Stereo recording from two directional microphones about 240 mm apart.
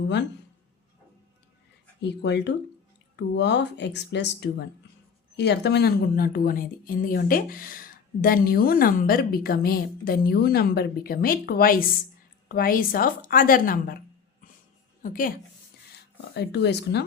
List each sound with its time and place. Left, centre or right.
2.0 s speech: left
15.0 s speech: left